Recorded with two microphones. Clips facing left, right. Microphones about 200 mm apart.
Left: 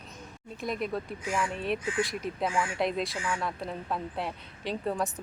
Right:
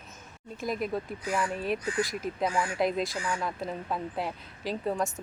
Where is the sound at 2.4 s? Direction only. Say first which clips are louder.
Right 1 dB; 40° right (ahead or behind).